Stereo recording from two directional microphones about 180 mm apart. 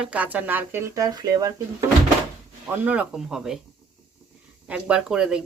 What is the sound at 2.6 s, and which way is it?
Speech, 10° right (ahead or behind).